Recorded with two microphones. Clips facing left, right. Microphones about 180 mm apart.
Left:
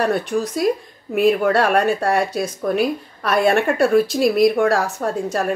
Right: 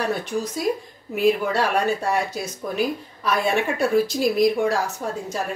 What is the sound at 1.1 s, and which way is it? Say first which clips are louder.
Speech: left 4 dB; 55° left (ahead or behind).